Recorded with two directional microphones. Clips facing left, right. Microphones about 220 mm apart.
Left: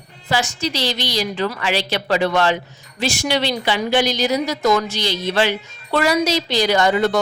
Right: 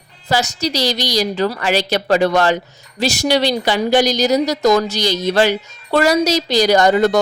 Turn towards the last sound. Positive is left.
turn(degrees=-40)  # may be behind; listen again after turning